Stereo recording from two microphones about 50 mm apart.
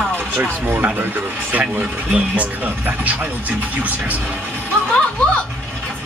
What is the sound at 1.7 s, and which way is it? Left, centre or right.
A man's voice, right.